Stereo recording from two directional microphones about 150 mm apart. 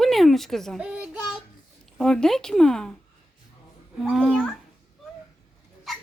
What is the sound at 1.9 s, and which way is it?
Speech, 5° left (ahead or behind).